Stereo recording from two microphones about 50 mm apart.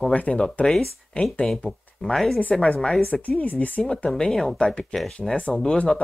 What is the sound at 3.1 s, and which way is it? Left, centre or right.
Speech, left.